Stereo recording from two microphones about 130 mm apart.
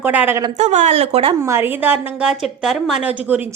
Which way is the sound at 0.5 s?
65° right (ahead or behind).